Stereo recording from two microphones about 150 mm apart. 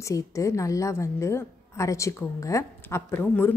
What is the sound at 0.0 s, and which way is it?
A woman's voice, 20° left (ahead or behind).